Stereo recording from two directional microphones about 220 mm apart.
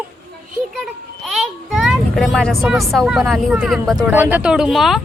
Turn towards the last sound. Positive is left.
turn(degrees=0)  # may be behind; listen again after turning